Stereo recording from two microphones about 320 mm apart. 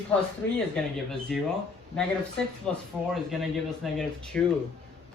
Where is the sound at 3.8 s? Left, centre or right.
Centre.